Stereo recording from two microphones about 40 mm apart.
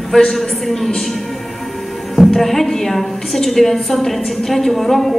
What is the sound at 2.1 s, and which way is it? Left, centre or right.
A woman's voice, centre.